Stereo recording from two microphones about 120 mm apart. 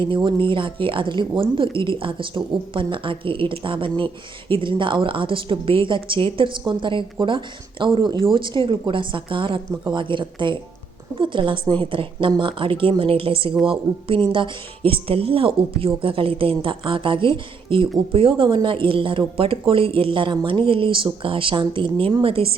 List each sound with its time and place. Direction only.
0.0 s a woman's voice: 45° right (ahead or behind)